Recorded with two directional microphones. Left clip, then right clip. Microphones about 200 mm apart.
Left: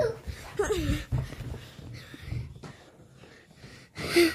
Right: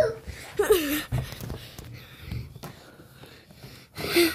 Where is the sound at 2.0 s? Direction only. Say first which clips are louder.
Right 1 dB; centre (ahead or behind).